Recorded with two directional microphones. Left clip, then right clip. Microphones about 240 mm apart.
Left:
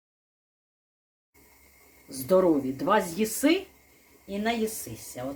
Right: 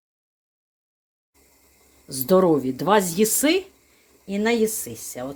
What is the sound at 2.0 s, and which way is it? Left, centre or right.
Speech, right.